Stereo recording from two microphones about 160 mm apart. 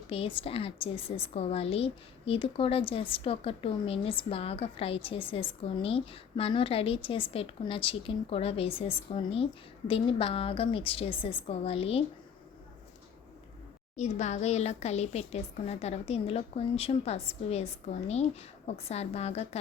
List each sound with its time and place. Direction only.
0.1 s a woman's voice: 35° left (ahead or behind)
13.9 s a woman's voice: 45° left (ahead or behind)